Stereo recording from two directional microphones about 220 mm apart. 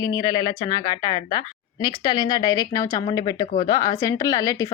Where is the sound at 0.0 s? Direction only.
15° left (ahead or behind).